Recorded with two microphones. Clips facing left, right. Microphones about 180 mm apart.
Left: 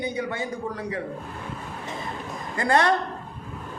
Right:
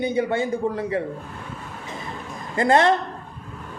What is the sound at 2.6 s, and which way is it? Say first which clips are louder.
Speech: right 4 dB; 25° right (ahead or behind).